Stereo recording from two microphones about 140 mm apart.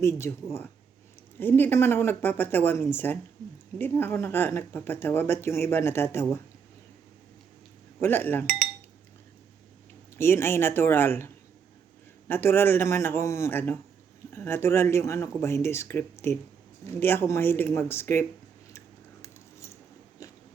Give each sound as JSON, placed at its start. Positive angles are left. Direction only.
{"t": 0.0, "sound": "speech", "side_deg": 20}
{"t": 1.4, "sound": "speech", "side_deg": 15}
{"t": 8.0, "sound": "speech", "side_deg": 15}
{"t": 10.2, "sound": "speech", "side_deg": 15}
{"t": 12.3, "sound": "speech", "side_deg": 15}
{"t": 19.2, "sound": "a sound", "side_deg": 20}